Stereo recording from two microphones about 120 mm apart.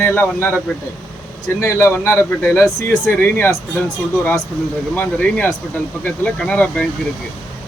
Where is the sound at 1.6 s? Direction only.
20° left (ahead or behind).